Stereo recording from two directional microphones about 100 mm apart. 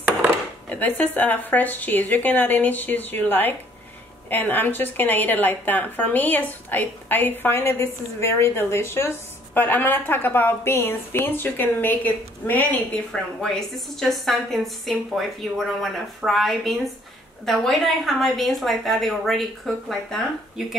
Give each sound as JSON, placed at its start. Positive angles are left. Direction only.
{"t": 0.7, "sound": "a woman's voice", "side_deg": 15}
{"t": 13.1, "sound": "a woman's voice", "side_deg": 5}